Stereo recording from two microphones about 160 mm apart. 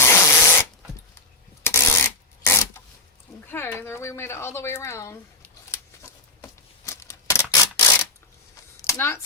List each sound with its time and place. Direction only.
0.0 s spray: 15° left (ahead or behind)
1.6 s rub: 15° left (ahead or behind)
3.4 s a sound: 15° left (ahead or behind)
6.4 s a sound: 15° left (ahead or behind)
7.5 s typewriter: 20° left (ahead or behind)
8.9 s speech: 15° left (ahead or behind)